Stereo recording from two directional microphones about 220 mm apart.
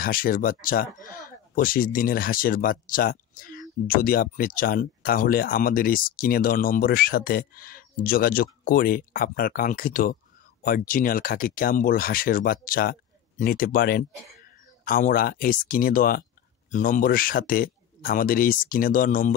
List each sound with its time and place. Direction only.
0.0 s speech: 40° left (ahead or behind)